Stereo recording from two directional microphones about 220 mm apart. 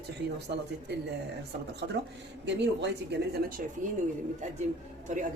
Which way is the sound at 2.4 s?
50° right (ahead or behind).